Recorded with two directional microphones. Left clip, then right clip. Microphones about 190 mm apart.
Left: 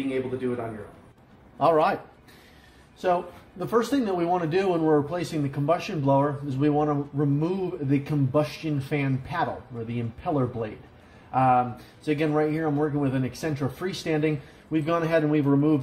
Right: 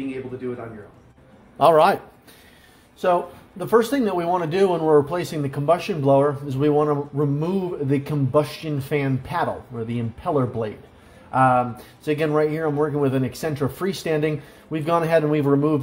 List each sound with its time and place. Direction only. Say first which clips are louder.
1.6 s speech: right 6 dB; 45° right (ahead or behind)
3.0 s speech: right 5 dB; 35° right (ahead or behind)